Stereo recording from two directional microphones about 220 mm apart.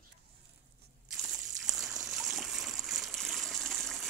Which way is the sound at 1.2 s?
Centre (ahead or behind).